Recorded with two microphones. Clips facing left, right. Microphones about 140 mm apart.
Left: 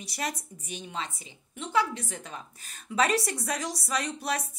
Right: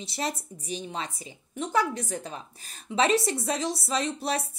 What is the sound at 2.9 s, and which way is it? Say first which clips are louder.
A woman's voice: right 3 dB; 25° right (ahead or behind).